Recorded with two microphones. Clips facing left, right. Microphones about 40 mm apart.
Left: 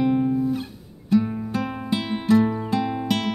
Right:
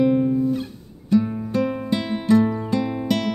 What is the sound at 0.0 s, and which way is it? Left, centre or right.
Music, centre.